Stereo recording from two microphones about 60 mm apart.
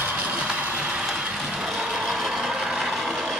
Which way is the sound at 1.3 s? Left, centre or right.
Centre.